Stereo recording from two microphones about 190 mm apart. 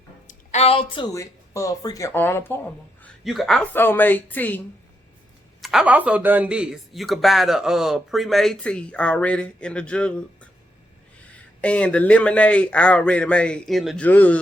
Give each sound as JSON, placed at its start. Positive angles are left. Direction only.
{"t": 0.3, "sound": "speech", "side_deg": 35}
{"t": 3.0, "sound": "a man's voice", "side_deg": 0}
{"t": 5.6, "sound": "a man's voice", "side_deg": -5}
{"t": 11.6, "sound": "a man's voice", "side_deg": 5}